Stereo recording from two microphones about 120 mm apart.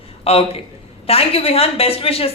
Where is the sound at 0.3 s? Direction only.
55° left (ahead or behind).